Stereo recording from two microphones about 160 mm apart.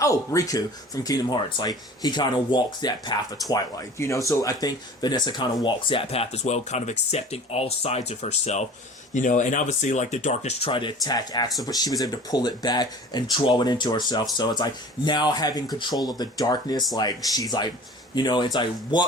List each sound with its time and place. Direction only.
0.0 s speech: 20° left (ahead or behind)